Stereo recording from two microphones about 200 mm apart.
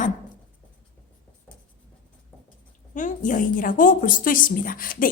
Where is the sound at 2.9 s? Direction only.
40° left (ahead or behind).